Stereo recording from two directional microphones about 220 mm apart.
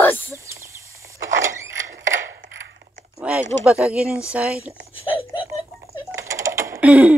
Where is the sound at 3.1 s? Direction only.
5° right (ahead or behind).